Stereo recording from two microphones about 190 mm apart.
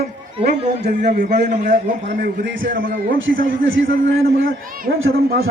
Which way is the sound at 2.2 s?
75° right (ahead or behind).